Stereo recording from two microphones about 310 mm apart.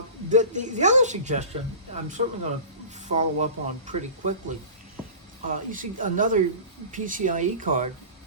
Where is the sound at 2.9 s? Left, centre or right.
Right.